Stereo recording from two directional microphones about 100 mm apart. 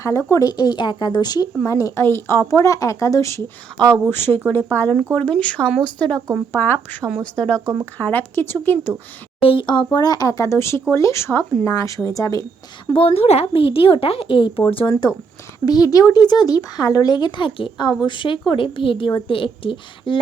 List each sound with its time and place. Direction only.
0.0 s speech: 30° left (ahead or behind)
1.6 s speech: 30° left (ahead or behind)
3.8 s speech: 10° left (ahead or behind)
4.1 s speech: 20° left (ahead or behind)
6.5 s speech: 20° left (ahead or behind)
7.2 s speech: 10° left (ahead or behind)
7.6 s speech: 30° right (ahead or behind)
7.9 s speech: 20° left (ahead or behind)
9.4 s speech: 60° left (ahead or behind); by 12.5 s 35° left (ahead or behind)
12.9 s speech: 65° left (ahead or behind)
15.6 s speech: 40° left (ahead or behind); by 20.1 s 55° left (ahead or behind)